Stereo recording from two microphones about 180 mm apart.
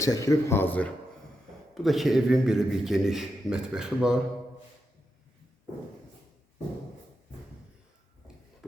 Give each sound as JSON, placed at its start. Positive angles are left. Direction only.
{"t": 0.0, "sound": "speech", "side_deg": 20}
{"t": 1.7, "sound": "a man's voice", "side_deg": 0}